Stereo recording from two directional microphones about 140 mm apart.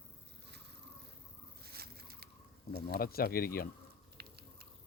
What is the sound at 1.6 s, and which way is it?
Bird, 90° right.